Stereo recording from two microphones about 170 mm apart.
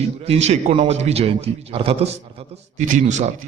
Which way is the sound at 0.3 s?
40° right (ahead or behind).